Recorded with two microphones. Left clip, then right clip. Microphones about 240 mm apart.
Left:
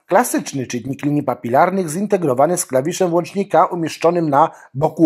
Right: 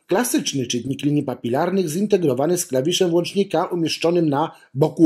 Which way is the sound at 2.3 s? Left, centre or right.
Left.